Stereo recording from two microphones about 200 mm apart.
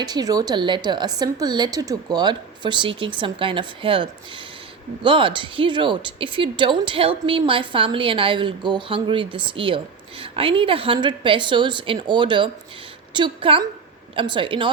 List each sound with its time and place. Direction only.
0.0 s a woman's voice: 20° right (ahead or behind)